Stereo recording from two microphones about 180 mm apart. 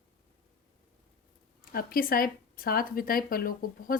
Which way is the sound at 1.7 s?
55° left (ahead or behind).